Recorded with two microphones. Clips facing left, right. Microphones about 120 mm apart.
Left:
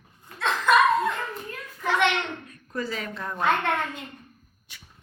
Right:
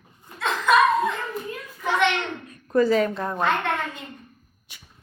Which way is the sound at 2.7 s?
50° right (ahead or behind).